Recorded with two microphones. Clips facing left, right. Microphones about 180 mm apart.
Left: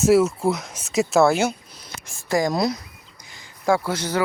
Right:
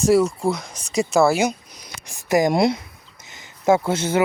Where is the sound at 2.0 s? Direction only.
20° right (ahead or behind).